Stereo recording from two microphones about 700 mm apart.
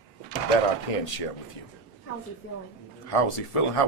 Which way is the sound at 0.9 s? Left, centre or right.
Left.